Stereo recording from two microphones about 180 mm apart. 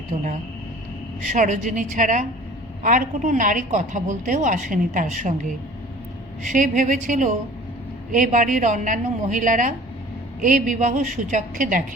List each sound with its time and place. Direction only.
0.1 s speech: 40° right (ahead or behind)
1.3 s a woman's voice: 45° right (ahead or behind)
6.5 s a woman's voice: 45° right (ahead or behind)